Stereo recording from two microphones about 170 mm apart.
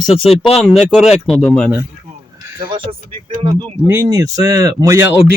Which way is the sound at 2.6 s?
30° right (ahead or behind).